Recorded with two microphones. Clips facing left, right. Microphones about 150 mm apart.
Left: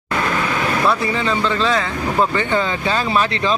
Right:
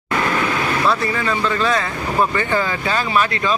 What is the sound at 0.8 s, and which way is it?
Speech, 20° left (ahead or behind).